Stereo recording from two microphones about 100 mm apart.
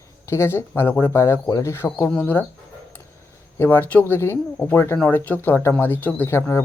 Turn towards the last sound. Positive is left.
turn(degrees=25)  # may be behind; listen again after turning